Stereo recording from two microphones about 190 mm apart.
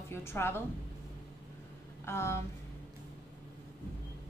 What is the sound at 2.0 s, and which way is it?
Speech, 15° left (ahead or behind).